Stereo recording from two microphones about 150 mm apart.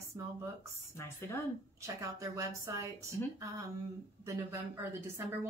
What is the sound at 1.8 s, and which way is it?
A woman's voice, 20° right (ahead or behind).